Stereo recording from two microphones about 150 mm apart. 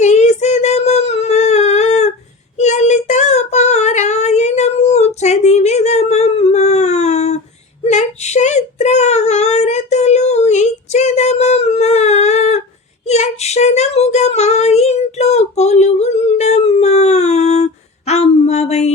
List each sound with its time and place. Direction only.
0.0 s a sound: 50° left (ahead or behind)
2.6 s child singing: 50° left (ahead or behind)
7.9 s whimper: 50° left (ahead or behind)
13.1 s female singing: 45° left (ahead or behind)